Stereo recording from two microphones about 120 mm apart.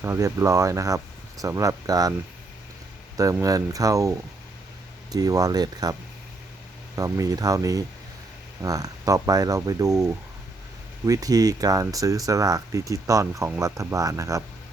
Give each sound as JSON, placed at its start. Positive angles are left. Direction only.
{"t": 0.0, "sound": "speech", "side_deg": -25}
{"t": 3.4, "sound": "speech", "side_deg": -30}
{"t": 5.1, "sound": "speech", "side_deg": -30}
{"t": 11.0, "sound": "speech", "side_deg": -30}